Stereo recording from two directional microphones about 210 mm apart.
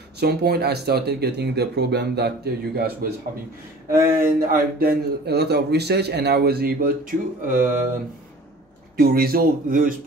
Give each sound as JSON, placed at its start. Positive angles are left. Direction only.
{"t": 0.2, "sound": "a man's voice", "side_deg": -50}
{"t": 4.2, "sound": "a man's voice", "side_deg": -45}
{"t": 8.9, "sound": "a man's voice", "side_deg": -45}